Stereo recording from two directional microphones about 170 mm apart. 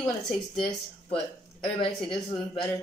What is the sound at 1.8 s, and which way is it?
Speech, 30° left (ahead or behind).